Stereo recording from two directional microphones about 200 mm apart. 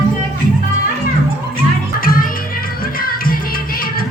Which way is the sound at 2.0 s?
45° left (ahead or behind).